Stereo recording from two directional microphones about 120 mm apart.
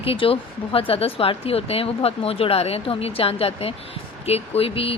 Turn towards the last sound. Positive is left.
turn(degrees=55)  # may be behind; listen again after turning